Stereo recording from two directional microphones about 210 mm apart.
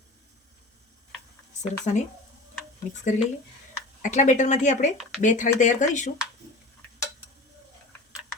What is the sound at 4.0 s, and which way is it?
Speech, 35° left (ahead or behind).